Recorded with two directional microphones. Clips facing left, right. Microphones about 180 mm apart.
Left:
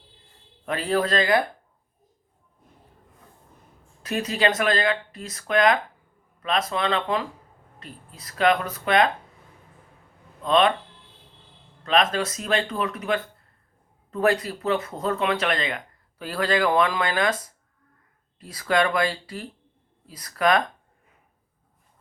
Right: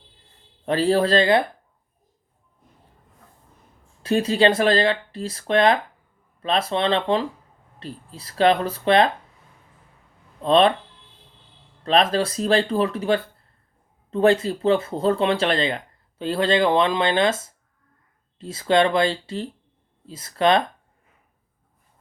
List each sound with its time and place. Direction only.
0.6 s speech: 30° right (ahead or behind)
4.0 s speech: 30° right (ahead or behind)
10.4 s speech: 30° right (ahead or behind)
11.8 s speech: 30° right (ahead or behind)